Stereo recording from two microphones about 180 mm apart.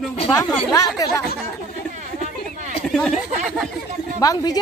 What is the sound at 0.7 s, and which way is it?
Speech, 20° left (ahead or behind).